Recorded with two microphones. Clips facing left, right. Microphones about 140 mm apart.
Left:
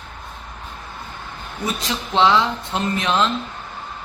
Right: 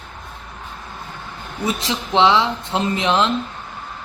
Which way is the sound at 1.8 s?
25° right (ahead or behind).